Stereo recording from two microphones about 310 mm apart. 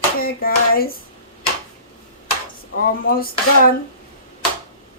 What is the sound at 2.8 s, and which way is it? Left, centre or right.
Speech, left.